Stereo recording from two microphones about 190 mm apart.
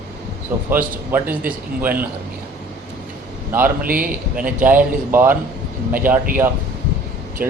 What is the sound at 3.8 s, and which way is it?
Speech, 45° right (ahead or behind).